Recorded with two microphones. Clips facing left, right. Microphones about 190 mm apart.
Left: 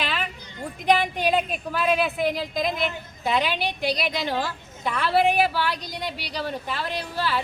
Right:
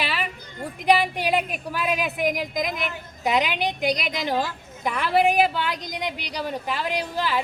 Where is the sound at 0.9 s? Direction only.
10° right (ahead or behind).